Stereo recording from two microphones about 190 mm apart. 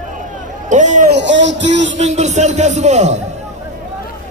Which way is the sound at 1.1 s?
70° right (ahead or behind).